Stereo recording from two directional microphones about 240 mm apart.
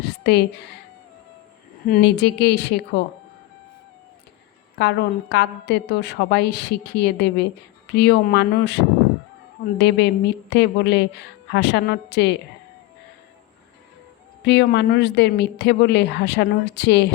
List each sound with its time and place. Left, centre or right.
0.0 s a sound: left
1.9 s a woman's voice: left
4.8 s a woman's voice: left
14.4 s a woman's voice: left